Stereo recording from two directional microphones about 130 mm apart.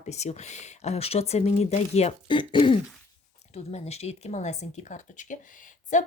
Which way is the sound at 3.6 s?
55° left (ahead or behind).